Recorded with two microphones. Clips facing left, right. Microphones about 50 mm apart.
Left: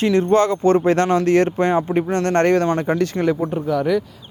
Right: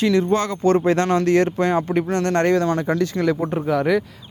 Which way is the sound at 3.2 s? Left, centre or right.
Centre.